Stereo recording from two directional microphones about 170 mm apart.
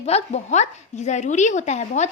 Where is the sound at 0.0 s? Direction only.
40° left (ahead or behind).